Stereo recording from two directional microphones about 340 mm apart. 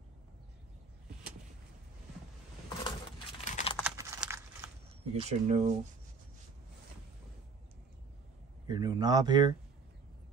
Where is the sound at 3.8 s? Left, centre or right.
Centre.